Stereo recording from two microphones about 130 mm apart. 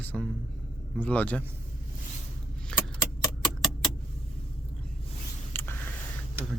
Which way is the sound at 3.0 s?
30° left (ahead or behind).